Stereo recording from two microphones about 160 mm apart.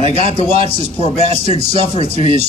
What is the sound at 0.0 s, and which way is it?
A man's voice, 40° right (ahead or behind).